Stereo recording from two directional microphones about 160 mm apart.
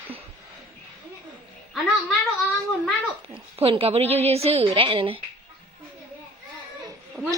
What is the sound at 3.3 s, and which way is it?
A woman's voice, 35° right (ahead or behind).